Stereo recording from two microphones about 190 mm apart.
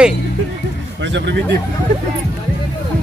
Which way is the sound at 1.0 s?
70° right (ahead or behind).